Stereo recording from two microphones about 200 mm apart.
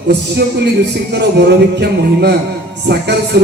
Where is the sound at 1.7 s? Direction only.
55° right (ahead or behind).